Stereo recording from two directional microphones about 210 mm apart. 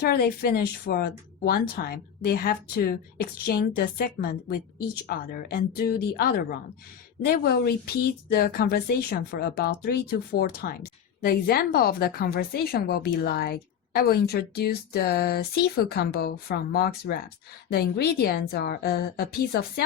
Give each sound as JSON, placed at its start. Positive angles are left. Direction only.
{"t": 0.0, "sound": "speech", "side_deg": 45}